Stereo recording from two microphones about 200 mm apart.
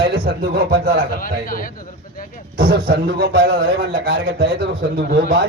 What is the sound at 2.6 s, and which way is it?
A man's voice, 50° right (ahead or behind).